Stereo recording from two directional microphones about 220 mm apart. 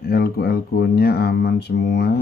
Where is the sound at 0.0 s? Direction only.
45° left (ahead or behind).